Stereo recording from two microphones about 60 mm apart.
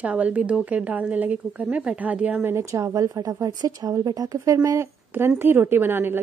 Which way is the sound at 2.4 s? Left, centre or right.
Right.